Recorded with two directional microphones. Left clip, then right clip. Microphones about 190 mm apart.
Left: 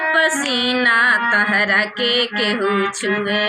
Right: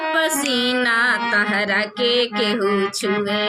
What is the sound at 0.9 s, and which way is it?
Music, 25° right (ahead or behind).